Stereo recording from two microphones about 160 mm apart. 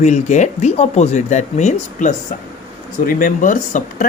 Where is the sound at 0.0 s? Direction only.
45° left (ahead or behind).